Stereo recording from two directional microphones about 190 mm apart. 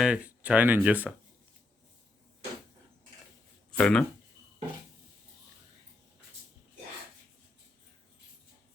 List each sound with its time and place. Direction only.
0.0 s speech: 5° right (ahead or behind)
3.7 s speech: 5° left (ahead or behind)